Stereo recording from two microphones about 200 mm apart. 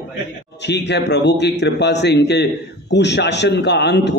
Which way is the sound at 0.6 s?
60° left (ahead or behind).